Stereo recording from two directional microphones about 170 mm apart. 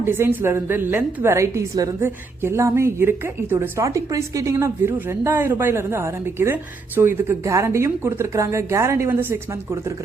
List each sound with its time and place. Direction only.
0.0 s a woman's voice: 10° right (ahead or behind)